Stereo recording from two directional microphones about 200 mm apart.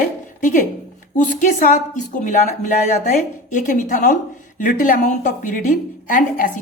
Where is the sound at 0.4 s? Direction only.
40° left (ahead or behind).